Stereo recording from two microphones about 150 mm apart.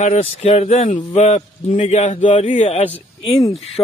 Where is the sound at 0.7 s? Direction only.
55° left (ahead or behind).